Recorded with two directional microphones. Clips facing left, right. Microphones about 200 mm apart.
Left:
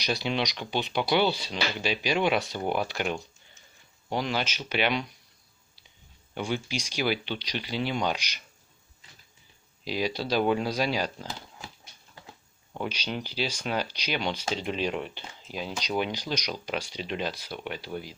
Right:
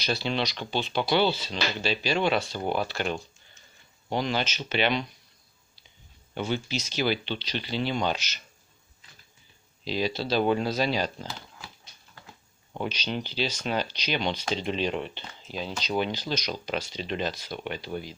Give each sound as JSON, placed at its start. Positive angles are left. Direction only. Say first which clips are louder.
{"t": 0.0, "sound": "speech", "louder": "even", "side_deg": 15}
{"t": 6.3, "sound": "speech", "louder": "right 1 dB", "side_deg": 10}
{"t": 9.8, "sound": "speech", "louder": "right 1 dB", "side_deg": 10}
{"t": 12.8, "sound": "speech", "louder": "right 2 dB", "side_deg": 10}